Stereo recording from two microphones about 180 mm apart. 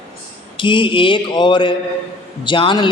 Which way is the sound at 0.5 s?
25° left (ahead or behind).